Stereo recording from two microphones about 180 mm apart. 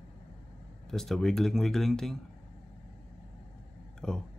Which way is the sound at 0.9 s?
Centre (ahead or behind).